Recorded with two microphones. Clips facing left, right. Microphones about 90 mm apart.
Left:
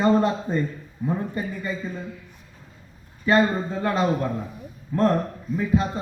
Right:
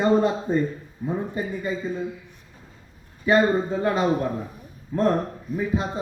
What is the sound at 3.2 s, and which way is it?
A man's voice, 15° right (ahead or behind).